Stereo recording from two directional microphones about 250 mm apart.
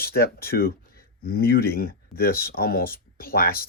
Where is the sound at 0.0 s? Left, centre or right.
Left.